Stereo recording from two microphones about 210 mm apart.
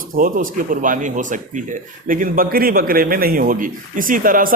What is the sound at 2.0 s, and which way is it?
A man's voice, 40° right (ahead or behind).